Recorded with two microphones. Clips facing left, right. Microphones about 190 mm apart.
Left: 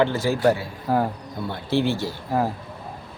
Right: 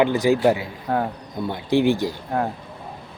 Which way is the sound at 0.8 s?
Centre (ahead or behind).